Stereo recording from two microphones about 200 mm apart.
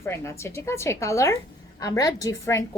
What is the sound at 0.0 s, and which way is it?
A woman's voice, 15° left (ahead or behind).